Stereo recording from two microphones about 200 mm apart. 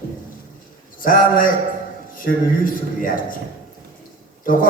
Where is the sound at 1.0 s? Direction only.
45° left (ahead or behind).